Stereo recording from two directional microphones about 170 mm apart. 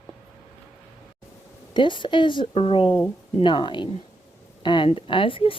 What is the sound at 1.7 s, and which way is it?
A woman's voice, 30° left (ahead or behind).